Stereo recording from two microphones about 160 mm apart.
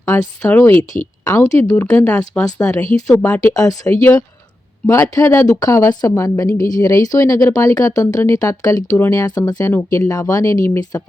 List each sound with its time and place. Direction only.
0.0 s speech: 15° left (ahead or behind)
3.5 s speech: 20° left (ahead or behind)